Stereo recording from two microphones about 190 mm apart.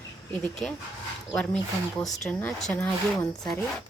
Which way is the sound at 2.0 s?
Centre (ahead or behind).